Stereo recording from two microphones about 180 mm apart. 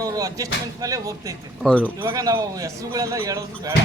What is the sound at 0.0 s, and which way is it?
Speech, 20° right (ahead or behind).